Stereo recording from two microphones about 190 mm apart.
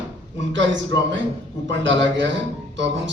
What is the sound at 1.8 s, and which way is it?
Speech, 70° right (ahead or behind).